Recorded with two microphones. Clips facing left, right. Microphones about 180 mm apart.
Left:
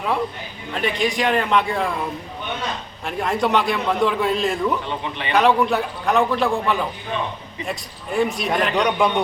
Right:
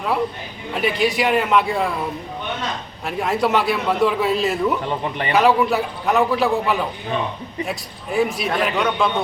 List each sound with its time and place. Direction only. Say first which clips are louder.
0.7 s a man's voice: right 2 dB; 5° right (ahead or behind)
3.1 s a man's voice: right 1 dB; 5° right (ahead or behind)
8.7 s speech: left 1 dB; 15° left (ahead or behind)